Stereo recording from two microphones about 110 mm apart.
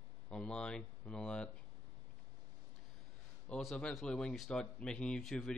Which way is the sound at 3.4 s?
10° left (ahead or behind).